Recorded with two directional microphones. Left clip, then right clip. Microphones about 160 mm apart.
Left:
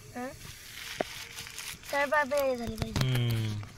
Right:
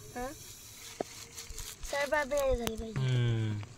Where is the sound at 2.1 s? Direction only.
45° right (ahead or behind).